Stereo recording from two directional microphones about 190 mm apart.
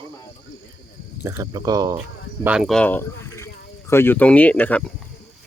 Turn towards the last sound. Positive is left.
turn(degrees=5)  # may be behind; listen again after turning